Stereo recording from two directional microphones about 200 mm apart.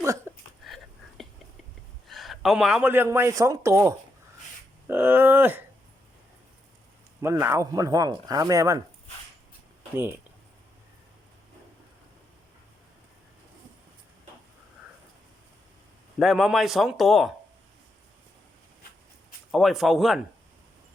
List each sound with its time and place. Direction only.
0.0 s a sound: 15° right (ahead or behind)
1.2 s whispering: centre (ahead or behind)
2.0 s speech: centre (ahead or behind)
7.2 s speech: 15° right (ahead or behind)
16.1 s a man's voice: centre (ahead or behind)
19.5 s a man's voice: centre (ahead or behind)